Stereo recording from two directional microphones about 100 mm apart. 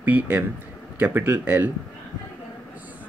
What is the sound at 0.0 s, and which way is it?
Speech, 20° right (ahead or behind).